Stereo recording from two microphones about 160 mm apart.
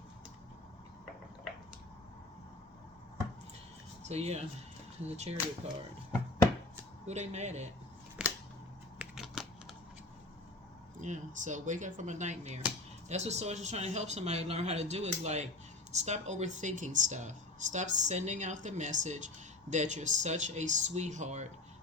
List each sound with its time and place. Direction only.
4.1 s speech: 40° right (ahead or behind)
7.0 s speech: 45° right (ahead or behind)
8.2 s a sound: 5° right (ahead or behind)
9.0 s computer keyboard: 5° right (ahead or behind)
11.0 s speech: 50° right (ahead or behind)